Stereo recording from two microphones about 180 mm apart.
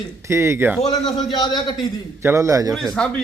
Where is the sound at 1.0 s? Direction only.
25° left (ahead or behind).